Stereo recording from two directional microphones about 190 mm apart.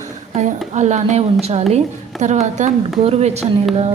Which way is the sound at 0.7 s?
35° right (ahead or behind).